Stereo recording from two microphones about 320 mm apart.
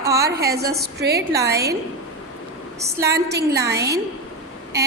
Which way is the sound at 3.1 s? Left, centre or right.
Right.